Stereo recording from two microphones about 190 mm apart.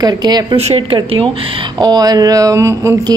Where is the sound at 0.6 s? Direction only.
30° right (ahead or behind).